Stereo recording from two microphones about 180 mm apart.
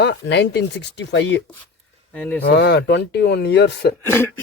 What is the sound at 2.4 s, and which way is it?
Speech, 70° left (ahead or behind).